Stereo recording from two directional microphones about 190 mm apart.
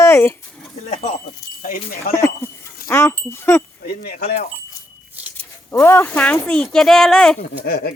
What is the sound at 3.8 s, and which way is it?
Speech, 55° left (ahead or behind).